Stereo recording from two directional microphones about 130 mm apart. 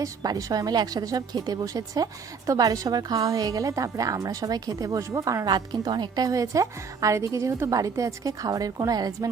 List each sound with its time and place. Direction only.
0.0 s a woman's voice: 30° right (ahead or behind)